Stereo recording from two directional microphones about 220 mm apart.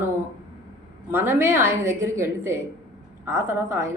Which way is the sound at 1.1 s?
10° right (ahead or behind).